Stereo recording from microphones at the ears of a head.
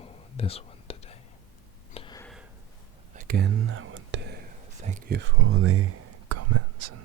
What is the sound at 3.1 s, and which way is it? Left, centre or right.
Whispering, right.